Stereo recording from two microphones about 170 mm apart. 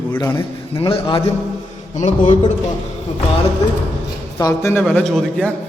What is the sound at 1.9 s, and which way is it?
Speech, 45° left (ahead or behind).